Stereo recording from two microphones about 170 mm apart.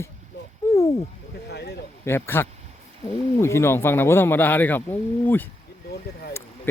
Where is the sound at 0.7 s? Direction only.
20° left (ahead or behind).